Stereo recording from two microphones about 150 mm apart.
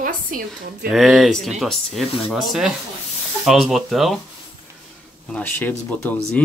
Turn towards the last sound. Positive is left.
turn(degrees=10)  # may be behind; listen again after turning